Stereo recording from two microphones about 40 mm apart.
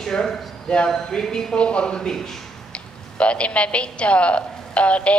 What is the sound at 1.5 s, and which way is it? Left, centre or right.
A woman's voice, left.